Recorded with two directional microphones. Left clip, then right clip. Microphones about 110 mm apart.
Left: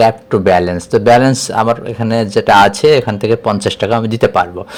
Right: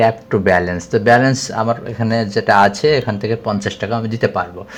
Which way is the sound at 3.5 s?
45° left (ahead or behind).